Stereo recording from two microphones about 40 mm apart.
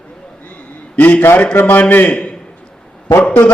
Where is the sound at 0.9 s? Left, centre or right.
Left.